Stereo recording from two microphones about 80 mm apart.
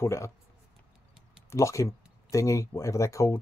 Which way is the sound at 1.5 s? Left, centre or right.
Left.